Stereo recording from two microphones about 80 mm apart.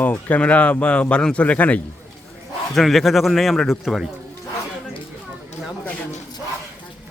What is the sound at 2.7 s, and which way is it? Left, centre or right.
A man's voice, centre.